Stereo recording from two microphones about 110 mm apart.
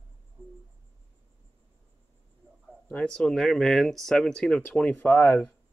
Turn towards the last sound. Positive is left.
turn(degrees=20)  # may be behind; listen again after turning